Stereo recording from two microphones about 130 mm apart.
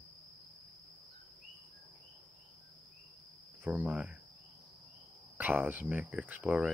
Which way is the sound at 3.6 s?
10° right (ahead or behind).